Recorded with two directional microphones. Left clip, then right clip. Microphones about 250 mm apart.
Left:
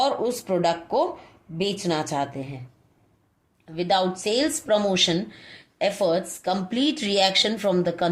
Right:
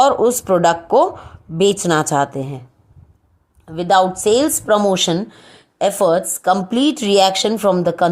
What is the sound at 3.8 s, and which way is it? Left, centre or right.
A woman's voice, right.